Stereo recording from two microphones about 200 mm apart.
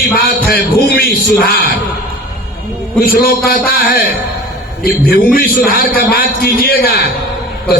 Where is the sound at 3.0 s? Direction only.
50° left (ahead or behind).